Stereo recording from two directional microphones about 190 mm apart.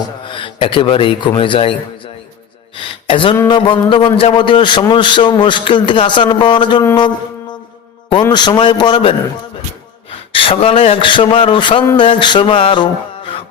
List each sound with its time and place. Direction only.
0.3 s speech: 25° left (ahead or behind)
2.7 s a sound: 25° left (ahead or behind)
3.3 s a man's voice: 20° left (ahead or behind)
8.1 s a man's voice: 20° left (ahead or behind)
10.3 s a man's voice: 30° left (ahead or behind)